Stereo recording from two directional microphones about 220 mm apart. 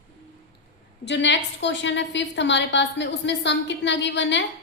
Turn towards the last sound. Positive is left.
turn(degrees=55)  # may be behind; listen again after turning